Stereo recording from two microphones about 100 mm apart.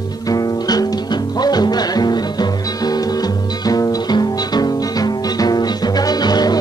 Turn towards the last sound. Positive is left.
turn(degrees=40)  # may be behind; listen again after turning